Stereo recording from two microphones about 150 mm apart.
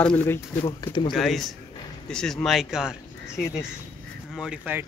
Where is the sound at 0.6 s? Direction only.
35° left (ahead or behind).